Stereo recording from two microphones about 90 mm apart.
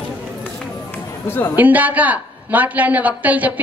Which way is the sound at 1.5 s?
20° right (ahead or behind).